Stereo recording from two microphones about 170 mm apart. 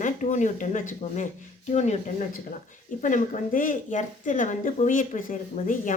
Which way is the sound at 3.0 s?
50° left (ahead or behind).